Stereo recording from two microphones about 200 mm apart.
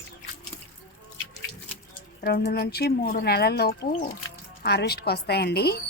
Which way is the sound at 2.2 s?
50° left (ahead or behind).